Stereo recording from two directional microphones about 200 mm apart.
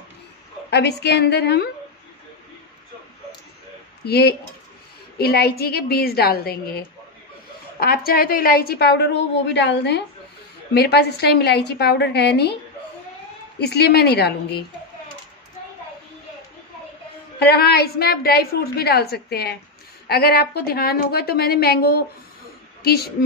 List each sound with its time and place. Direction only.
0.7 s a woman's voice: 55° left (ahead or behind)
4.0 s a woman's voice: 55° left (ahead or behind)
7.8 s a woman's voice: 50° left (ahead or behind)
13.6 s a woman's voice: 55° left (ahead or behind)
17.4 s a woman's voice: 50° left (ahead or behind)